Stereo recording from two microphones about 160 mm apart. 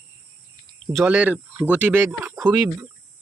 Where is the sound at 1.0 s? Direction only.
5° right (ahead or behind).